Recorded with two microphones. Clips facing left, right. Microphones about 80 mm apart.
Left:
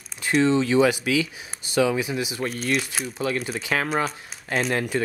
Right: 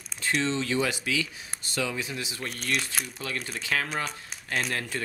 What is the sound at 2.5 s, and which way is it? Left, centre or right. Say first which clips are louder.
Speech: left 5 dB; centre.